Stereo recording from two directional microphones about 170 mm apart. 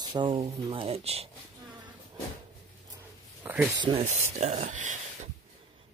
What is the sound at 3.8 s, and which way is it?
Speech, 35° right (ahead or behind).